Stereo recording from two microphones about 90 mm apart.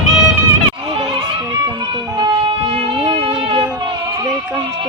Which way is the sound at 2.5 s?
90° right.